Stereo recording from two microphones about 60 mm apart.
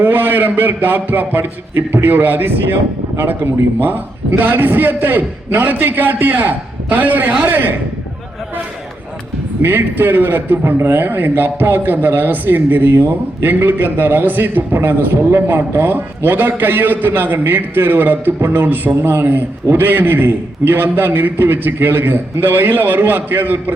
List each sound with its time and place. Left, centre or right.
0.0 s a man's voice: right
9.6 s a man's voice: right